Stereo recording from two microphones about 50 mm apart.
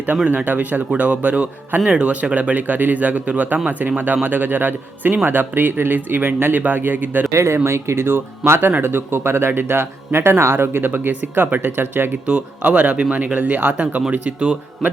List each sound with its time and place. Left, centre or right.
0.3 s speech: right
7.3 s speech: right
12.6 s a man's voice: right